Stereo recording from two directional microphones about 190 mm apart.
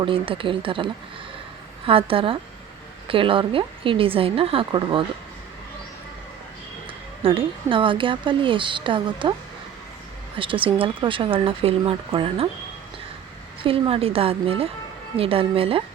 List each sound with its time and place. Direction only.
0.0 s a woman's voice: 25° right (ahead or behind)
7.2 s a woman's voice: 30° right (ahead or behind)
10.3 s a woman's voice: 25° right (ahead or behind)
13.6 s a woman's voice: 30° right (ahead or behind)